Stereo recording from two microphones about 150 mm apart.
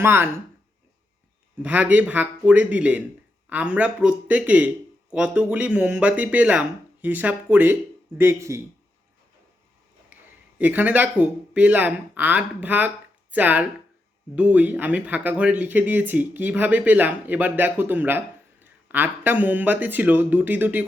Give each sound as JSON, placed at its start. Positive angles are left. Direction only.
{"t": 0.0, "sound": "speech", "side_deg": -15}
{"t": 1.6, "sound": "speech", "side_deg": -10}
{"t": 10.6, "sound": "speech", "side_deg": -10}